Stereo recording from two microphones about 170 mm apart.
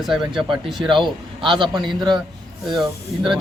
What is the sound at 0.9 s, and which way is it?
Speech, 30° right (ahead or behind).